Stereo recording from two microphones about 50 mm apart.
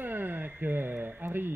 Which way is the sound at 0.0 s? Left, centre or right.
Right.